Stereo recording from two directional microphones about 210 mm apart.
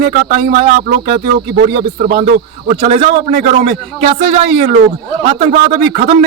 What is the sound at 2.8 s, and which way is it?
A man's voice, 30° right (ahead or behind).